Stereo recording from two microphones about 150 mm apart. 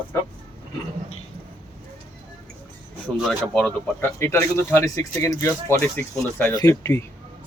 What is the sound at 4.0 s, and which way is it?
Speech, 15° left (ahead or behind).